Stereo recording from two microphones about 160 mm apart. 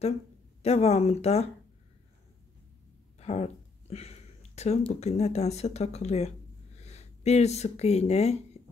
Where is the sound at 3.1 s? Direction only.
40° left (ahead or behind).